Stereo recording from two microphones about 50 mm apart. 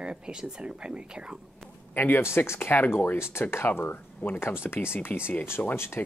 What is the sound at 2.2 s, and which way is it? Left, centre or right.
Speech, left.